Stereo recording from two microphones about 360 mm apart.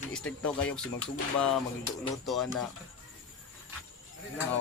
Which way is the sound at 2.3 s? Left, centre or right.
Centre.